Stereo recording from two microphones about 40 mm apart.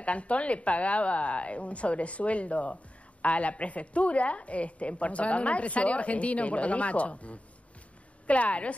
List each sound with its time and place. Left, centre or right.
0.0 s a woman's voice: left